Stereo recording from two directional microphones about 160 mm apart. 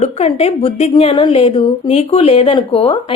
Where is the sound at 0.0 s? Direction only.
40° left (ahead or behind).